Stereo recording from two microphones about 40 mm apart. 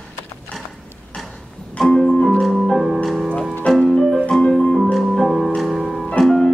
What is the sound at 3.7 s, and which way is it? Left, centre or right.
Music, centre.